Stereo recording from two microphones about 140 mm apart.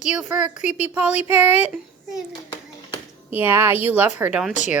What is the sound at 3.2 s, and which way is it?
A child's voice, 15° right (ahead or behind).